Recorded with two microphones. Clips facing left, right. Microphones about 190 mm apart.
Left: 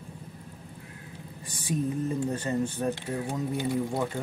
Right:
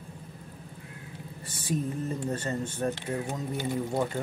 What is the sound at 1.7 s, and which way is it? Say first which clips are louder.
Speech: left 1 dB; 20° right (ahead or behind).